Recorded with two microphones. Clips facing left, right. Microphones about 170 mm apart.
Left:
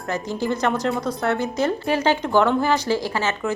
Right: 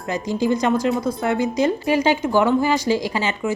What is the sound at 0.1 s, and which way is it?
Speech, 15° right (ahead or behind).